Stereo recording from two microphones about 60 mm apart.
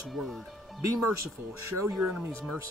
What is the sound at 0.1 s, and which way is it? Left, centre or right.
Speech, centre.